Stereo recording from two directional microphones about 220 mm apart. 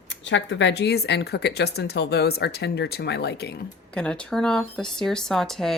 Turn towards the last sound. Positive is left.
turn(degrees=0)  # may be behind; listen again after turning